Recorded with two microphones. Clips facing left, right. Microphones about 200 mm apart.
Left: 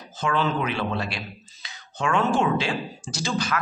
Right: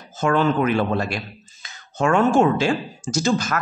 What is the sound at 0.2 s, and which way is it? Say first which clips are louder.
Speech: right 6 dB; 50° right (ahead or behind).